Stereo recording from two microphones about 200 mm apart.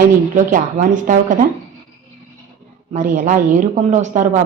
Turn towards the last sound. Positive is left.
turn(degrees=-35)  # may be behind; listen again after turning